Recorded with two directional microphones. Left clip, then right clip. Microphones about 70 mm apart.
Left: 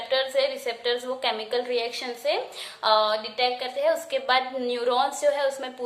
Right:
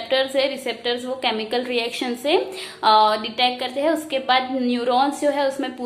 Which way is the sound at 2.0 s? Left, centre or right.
Centre.